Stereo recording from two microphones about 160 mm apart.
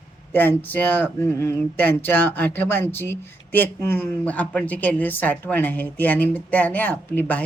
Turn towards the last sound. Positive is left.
turn(degrees=10)  # may be behind; listen again after turning